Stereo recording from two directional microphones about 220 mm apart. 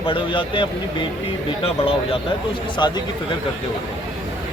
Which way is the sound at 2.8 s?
20° left (ahead or behind).